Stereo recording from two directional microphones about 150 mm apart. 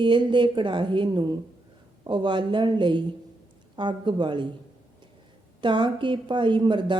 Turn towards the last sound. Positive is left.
turn(degrees=-30)  # may be behind; listen again after turning